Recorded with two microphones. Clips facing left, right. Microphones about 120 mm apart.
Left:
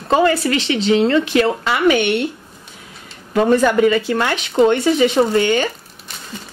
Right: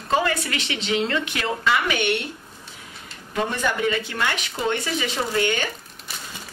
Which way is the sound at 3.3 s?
60° left (ahead or behind).